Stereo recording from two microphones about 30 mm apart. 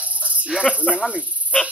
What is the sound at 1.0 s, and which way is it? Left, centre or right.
Speech, right.